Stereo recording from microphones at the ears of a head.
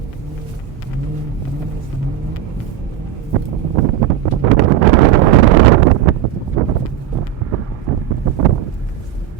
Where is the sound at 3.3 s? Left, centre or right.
Right.